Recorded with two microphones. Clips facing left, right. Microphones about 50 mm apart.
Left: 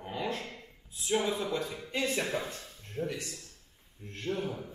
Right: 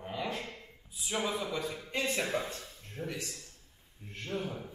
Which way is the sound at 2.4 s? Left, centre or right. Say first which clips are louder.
Even; left.